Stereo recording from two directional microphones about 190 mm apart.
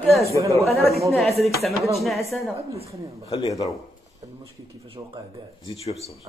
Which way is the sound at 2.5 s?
30° right (ahead or behind).